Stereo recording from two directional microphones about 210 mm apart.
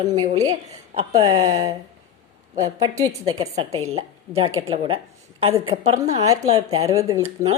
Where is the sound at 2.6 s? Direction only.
15° right (ahead or behind).